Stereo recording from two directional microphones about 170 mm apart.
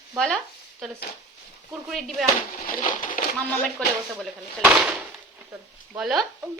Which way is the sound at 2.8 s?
50° left (ahead or behind).